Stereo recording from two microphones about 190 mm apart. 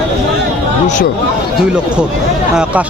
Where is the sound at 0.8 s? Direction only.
40° left (ahead or behind).